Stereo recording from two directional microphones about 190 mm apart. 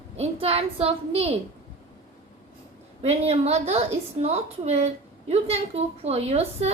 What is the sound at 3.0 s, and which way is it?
A woman's voice, 35° right (ahead or behind).